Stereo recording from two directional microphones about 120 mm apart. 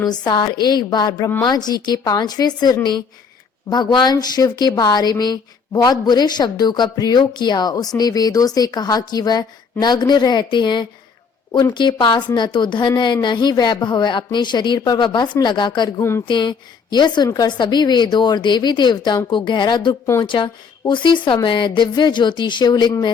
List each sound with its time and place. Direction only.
0.0 s a woman's voice: 35° left (ahead or behind)
16.0 s a woman's voice: 20° left (ahead or behind)
16.2 s a woman's voice: 40° left (ahead or behind)